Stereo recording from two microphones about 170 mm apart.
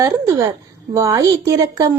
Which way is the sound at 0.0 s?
20° right (ahead or behind).